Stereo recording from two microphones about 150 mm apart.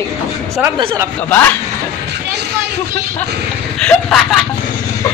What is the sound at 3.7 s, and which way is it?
Speech, 5° left (ahead or behind).